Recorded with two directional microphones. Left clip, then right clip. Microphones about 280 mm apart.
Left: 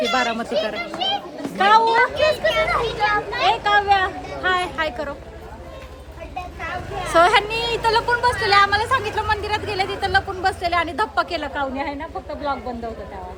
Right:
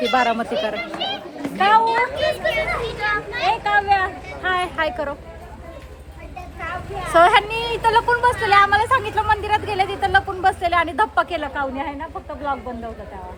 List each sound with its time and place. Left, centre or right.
0.1 s a woman's voice: centre
1.8 s a child's voice: left
3.4 s speech: centre
6.6 s speech: centre